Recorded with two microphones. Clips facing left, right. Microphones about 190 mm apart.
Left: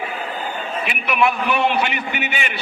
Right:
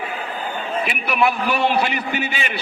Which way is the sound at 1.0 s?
35° right (ahead or behind).